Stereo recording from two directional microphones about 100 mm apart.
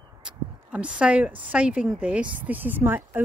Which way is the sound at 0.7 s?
10° right (ahead or behind).